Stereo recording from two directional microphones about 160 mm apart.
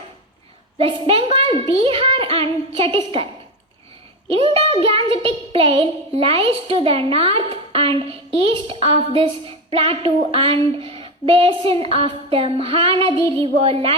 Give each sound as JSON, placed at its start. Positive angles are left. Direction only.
{"t": 0.8, "sound": "a child's voice", "side_deg": -35}
{"t": 4.3, "sound": "a child's voice", "side_deg": -35}